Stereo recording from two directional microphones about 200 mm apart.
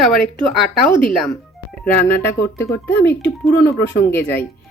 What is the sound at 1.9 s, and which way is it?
A woman's voice, 10° left (ahead or behind).